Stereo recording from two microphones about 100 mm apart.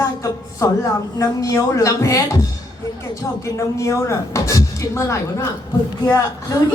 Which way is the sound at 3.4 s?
30° left (ahead or behind).